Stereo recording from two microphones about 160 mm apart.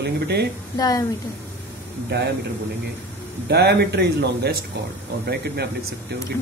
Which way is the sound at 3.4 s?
90° right.